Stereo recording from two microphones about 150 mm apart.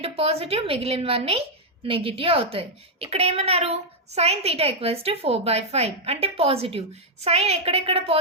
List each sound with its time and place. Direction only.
0.0 s a child's voice: 40° right (ahead or behind)